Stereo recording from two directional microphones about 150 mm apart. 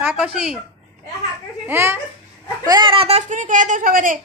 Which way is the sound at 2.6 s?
30° right (ahead or behind).